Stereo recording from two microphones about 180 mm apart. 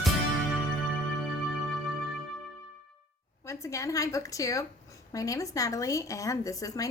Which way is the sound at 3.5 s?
15° left (ahead or behind).